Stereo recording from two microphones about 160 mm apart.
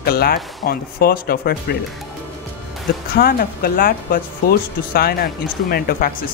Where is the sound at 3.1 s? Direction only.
70° left (ahead or behind).